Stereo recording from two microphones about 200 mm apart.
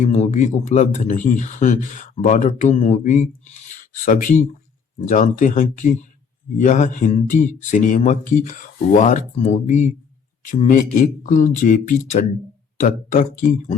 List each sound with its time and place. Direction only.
0.0 s speech: 35° left (ahead or behind)